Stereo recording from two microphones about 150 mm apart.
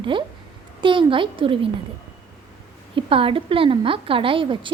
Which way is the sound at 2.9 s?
35° right (ahead or behind).